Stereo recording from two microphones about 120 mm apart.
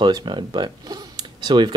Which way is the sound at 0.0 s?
40° right (ahead or behind).